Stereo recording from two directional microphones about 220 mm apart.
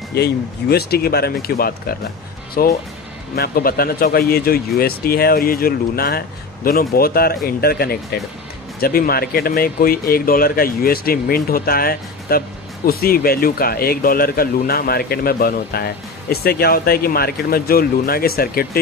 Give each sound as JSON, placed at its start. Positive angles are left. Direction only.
{"t": 0.1, "sound": "speech", "side_deg": 45}